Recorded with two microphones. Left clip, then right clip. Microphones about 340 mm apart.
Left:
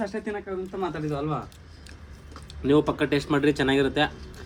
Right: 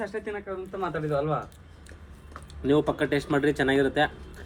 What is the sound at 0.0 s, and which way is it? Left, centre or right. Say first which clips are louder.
Speech: left 2 dB; left.